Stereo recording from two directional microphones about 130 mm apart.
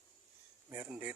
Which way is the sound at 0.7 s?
15° right (ahead or behind).